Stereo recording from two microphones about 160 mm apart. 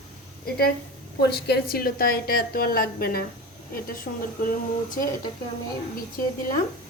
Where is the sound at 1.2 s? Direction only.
90° left; by 4.2 s 65° left (ahead or behind).